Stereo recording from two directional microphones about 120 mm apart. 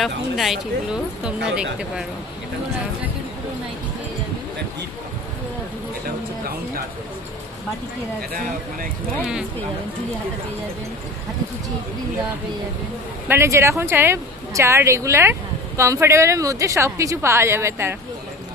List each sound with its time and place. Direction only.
0.0 s speech: centre (ahead or behind)
13.3 s speech: 25° right (ahead or behind)